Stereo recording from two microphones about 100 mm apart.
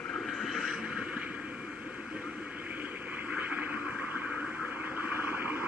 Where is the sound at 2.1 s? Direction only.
10° right (ahead or behind).